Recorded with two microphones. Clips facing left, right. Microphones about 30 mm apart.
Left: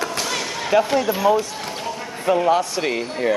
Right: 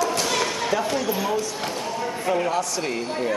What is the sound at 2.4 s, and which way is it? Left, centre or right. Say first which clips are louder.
Speech: left 6 dB; left.